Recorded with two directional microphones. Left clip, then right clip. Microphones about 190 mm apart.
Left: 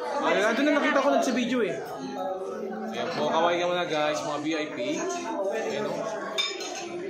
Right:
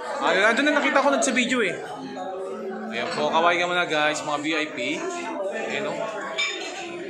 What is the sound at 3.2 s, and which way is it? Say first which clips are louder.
A man's voice: right 4 dB; 20° right (ahead or behind).